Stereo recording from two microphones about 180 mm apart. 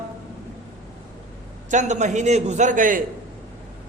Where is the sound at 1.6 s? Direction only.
40° right (ahead or behind).